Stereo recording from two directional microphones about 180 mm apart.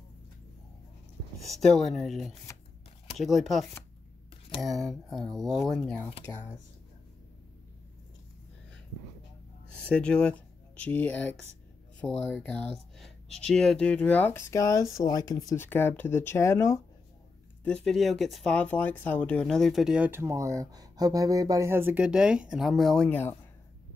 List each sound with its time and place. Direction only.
1.4 s speech: centre (ahead or behind)
9.8 s speech: 5° left (ahead or behind)
17.6 s speech: 5° left (ahead or behind)